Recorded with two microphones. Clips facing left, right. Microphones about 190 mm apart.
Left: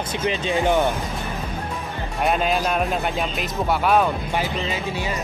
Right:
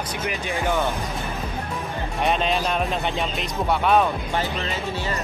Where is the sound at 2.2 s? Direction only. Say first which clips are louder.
Left 2 dB; 5° left (ahead or behind).